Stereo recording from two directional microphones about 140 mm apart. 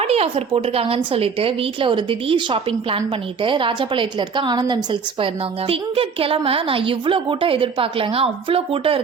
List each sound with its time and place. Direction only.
0.0 s a woman's voice: 45° right (ahead or behind)